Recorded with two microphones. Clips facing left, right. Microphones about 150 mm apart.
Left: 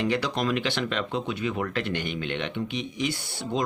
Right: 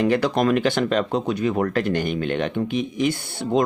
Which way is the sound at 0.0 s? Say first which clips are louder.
Right 7 dB; 50° right (ahead or behind).